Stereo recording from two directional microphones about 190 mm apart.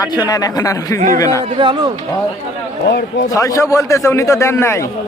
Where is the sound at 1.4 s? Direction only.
25° right (ahead or behind).